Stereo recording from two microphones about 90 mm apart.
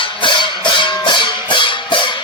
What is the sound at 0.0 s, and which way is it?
Music, 65° left (ahead or behind).